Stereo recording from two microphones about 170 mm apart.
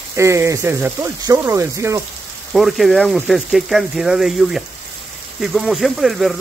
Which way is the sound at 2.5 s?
Centre (ahead or behind).